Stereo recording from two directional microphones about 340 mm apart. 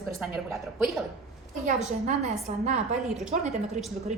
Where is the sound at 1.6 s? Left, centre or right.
Right.